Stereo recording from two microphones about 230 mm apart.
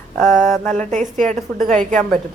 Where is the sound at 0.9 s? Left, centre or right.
Right.